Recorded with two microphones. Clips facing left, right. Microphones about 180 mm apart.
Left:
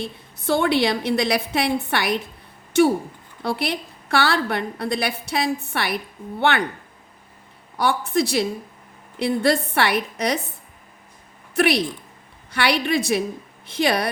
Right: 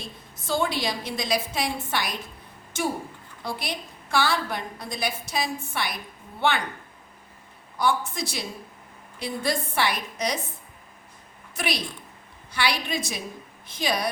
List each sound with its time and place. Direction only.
0.0 s a woman's voice: 65° left (ahead or behind)
7.8 s a woman's voice: 65° left (ahead or behind)
11.5 s a woman's voice: 65° left (ahead or behind)